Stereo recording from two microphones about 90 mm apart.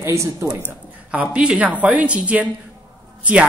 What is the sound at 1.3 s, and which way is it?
Speech, 10° right (ahead or behind).